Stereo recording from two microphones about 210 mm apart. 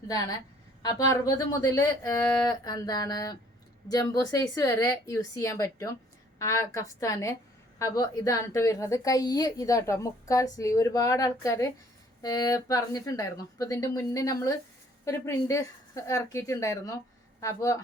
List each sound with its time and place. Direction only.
0.1 s a woman's voice: 15° left (ahead or behind)